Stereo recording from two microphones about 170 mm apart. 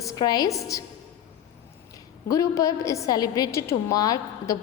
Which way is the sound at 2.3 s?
20° left (ahead or behind).